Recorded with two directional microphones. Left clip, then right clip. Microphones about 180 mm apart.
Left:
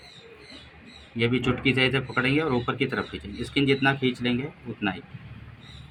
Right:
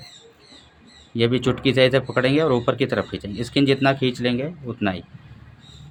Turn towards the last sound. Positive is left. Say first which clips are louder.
# right 4 dB
turn(degrees=-70)  # may be behind; listen again after turning